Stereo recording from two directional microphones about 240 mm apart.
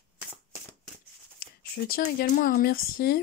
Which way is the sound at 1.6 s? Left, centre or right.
Left.